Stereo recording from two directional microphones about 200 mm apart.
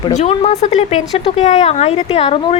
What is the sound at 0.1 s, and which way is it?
A woman's voice, 35° left (ahead or behind).